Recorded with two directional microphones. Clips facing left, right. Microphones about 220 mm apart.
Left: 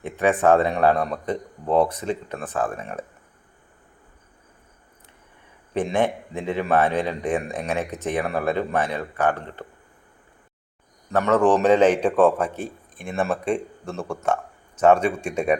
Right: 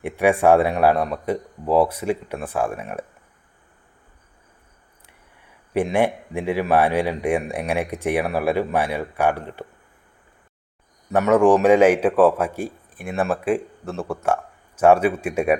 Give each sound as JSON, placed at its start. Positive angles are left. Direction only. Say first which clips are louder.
{"t": 0.0, "sound": "a man's voice", "louder": "right 2 dB", "side_deg": -10}
{"t": 5.7, "sound": "a man's voice", "louder": "right 2 dB", "side_deg": -10}
{"t": 11.1, "sound": "a man's voice", "louder": "right 3 dB", "side_deg": -10}